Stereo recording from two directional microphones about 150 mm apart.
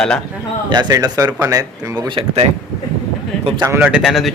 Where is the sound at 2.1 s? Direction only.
45° right (ahead or behind).